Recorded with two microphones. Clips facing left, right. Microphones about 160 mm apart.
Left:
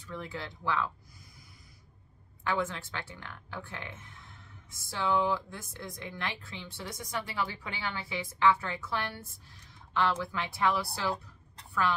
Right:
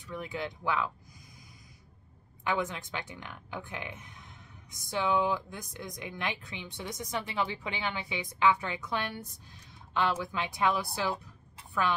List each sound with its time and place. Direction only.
0.0 s speech: 15° right (ahead or behind)
2.4 s a woman's voice: 15° right (ahead or behind)